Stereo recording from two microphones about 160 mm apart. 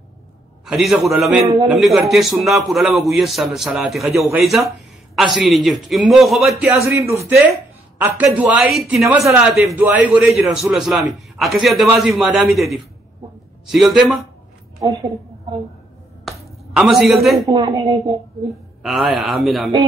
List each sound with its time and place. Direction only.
0.7 s a man's voice: centre (ahead or behind)
1.4 s speech: 20° right (ahead or behind)
1.7 s a man's voice: centre (ahead or behind)
6.9 s a man's voice: 15° right (ahead or behind); by 14.2 s centre (ahead or behind)
14.8 s a woman's voice: 20° right (ahead or behind)
16.3 s a sound: centre (ahead or behind)
16.7 s a man's voice: centre (ahead or behind)
17.4 s speech: 25° right (ahead or behind)
18.8 s a man's voice: centre (ahead or behind)